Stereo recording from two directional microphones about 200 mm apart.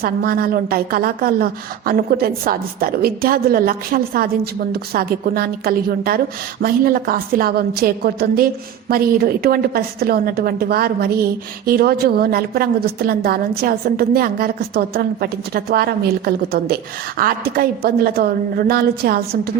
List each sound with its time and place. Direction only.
0.0 s a woman's voice: 50° right (ahead or behind)